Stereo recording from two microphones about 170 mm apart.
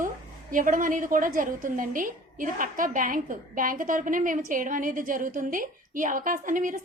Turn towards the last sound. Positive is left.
turn(degrees=-50)  # may be behind; listen again after turning